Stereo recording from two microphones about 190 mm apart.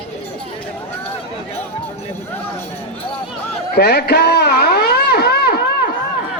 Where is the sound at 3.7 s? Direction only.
60° left (ahead or behind).